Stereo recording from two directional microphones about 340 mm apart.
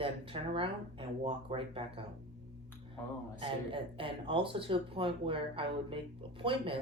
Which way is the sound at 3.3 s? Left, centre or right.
Centre.